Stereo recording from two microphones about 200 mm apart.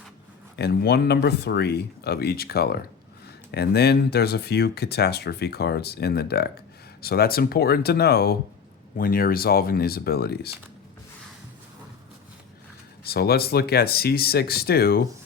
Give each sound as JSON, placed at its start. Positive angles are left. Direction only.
{"t": 0.5, "sound": "speech", "side_deg": 55}
{"t": 13.1, "sound": "speech", "side_deg": 50}